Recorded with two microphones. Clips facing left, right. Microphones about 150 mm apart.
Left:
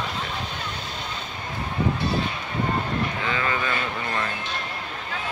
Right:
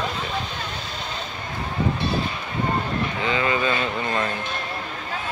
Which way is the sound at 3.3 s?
20° right (ahead or behind).